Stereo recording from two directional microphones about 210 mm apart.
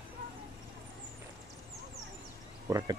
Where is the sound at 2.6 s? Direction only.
20° right (ahead or behind).